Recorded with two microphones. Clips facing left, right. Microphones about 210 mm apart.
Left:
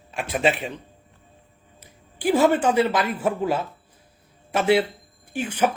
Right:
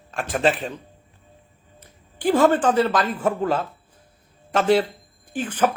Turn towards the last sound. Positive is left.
turn(degrees=10)  # may be behind; listen again after turning